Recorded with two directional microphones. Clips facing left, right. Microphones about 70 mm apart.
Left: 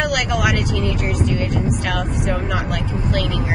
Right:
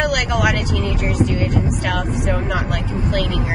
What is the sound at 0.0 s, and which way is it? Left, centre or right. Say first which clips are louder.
Speech: right 1 dB; centre.